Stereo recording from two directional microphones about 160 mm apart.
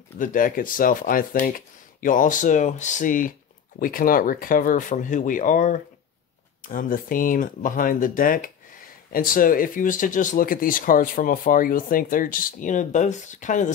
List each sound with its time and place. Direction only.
0.2 s speech: 60° left (ahead or behind)